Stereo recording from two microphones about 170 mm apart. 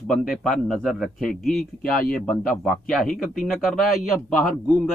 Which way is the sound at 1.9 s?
55° left (ahead or behind).